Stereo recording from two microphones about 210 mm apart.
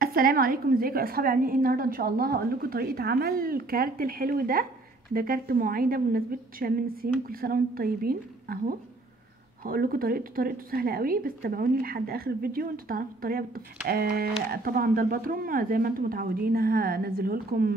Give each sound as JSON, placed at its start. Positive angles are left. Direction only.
{"t": 0.0, "sound": "a woman's voice", "side_deg": -45}